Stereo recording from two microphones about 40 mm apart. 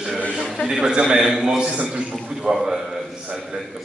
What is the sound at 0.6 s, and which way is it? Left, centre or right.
A man's voice, centre.